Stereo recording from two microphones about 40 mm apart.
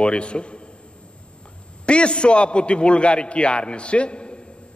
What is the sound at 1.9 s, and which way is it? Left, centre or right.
A man's voice, left.